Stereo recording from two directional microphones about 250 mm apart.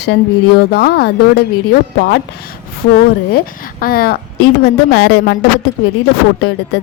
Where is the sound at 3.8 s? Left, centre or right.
Left.